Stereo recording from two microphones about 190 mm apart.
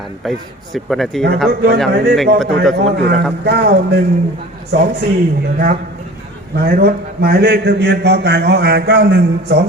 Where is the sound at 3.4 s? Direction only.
60° right (ahead or behind).